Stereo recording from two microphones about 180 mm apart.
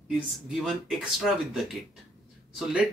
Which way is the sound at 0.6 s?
Centre (ahead or behind).